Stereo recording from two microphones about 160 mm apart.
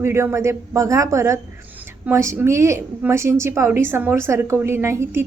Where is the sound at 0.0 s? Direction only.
15° right (ahead or behind).